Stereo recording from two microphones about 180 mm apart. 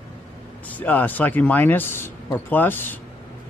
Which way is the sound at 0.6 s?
10° left (ahead or behind).